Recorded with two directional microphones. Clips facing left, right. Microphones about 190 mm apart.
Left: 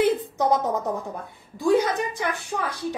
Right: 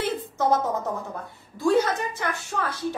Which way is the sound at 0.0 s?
15° left (ahead or behind).